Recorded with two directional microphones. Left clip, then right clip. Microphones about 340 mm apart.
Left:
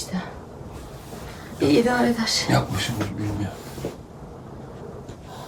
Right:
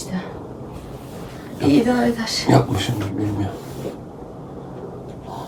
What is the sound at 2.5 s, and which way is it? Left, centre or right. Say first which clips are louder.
Speech: right 9 dB; right.